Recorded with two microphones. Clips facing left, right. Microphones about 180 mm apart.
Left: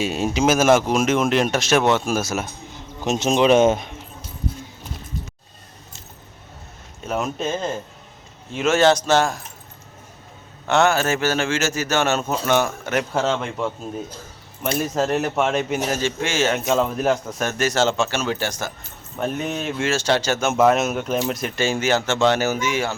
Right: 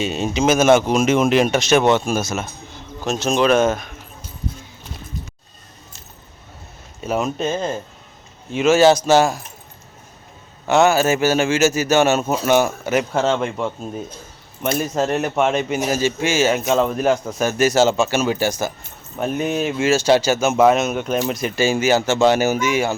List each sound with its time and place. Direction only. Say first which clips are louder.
0.0 s speech: right 1 dB; 5° left (ahead or behind)
3.0 s speech: even; 20° left (ahead or behind)
7.0 s a man's voice: right 3 dB; centre (ahead or behind)
10.7 s a man's voice: right 3 dB; 5° right (ahead or behind)